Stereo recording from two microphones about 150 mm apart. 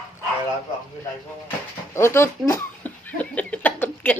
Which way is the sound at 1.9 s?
15° left (ahead or behind).